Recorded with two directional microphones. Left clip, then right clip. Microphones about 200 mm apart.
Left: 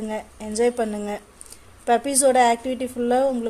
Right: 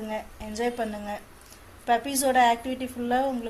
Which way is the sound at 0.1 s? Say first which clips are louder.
Left 4 dB; 70° left (ahead or behind).